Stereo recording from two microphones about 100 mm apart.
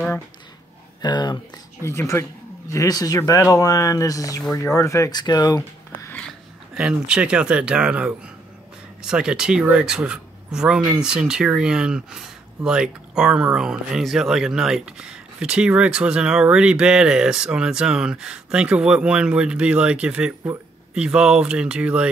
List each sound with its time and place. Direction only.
1.0 s speech: 45° left (ahead or behind)
1.8 s speech: 25° left (ahead or behind)
5.1 s speech: 45° left (ahead or behind)
6.8 s speech: 10° right (ahead or behind)